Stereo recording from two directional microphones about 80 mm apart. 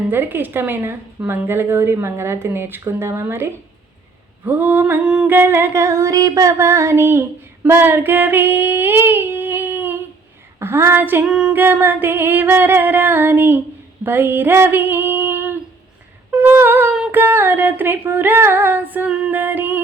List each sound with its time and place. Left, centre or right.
0.1 s music: right
1.3 s speech: right
4.4 s music: right
5.0 s humming: centre
5.3 s music: right
11.3 s humming: centre
11.5 s music: right
14.0 s female singing: right
16.3 s humming: right
17.1 s music: right